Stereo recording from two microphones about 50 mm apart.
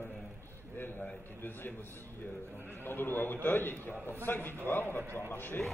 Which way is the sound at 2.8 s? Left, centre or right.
Left.